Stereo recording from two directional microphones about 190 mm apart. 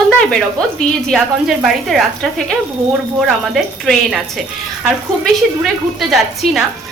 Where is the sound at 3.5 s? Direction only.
Centre (ahead or behind).